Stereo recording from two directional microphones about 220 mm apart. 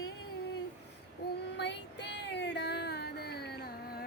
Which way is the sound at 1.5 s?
50° left (ahead or behind).